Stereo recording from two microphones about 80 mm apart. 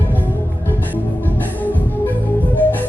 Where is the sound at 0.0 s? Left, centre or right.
Left.